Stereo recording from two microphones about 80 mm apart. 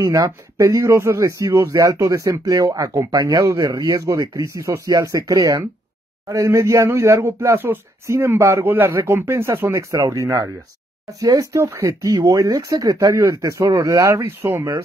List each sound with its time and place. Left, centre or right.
0.0 s speech: right
6.2 s speech: right
11.7 s speech: right
12.0 s speech: right